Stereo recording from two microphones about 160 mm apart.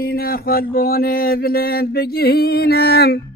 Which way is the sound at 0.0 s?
70° left (ahead or behind).